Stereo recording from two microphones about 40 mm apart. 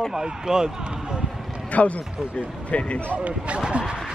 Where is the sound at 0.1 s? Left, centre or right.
Centre.